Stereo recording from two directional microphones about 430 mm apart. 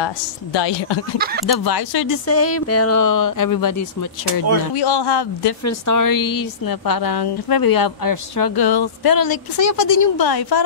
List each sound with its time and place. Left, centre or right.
0.0 s a woman's voice: left
1.1 s speech: right
1.6 s a woman's voice: left
2.2 s speech: left
4.7 s speech: left
5.7 s a woman's voice: left